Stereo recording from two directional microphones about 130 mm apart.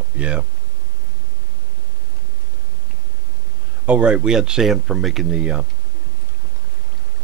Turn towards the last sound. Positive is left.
turn(degrees=-10)  # may be behind; listen again after turning